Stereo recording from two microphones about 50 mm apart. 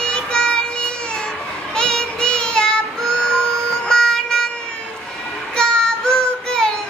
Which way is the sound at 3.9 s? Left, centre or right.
Centre.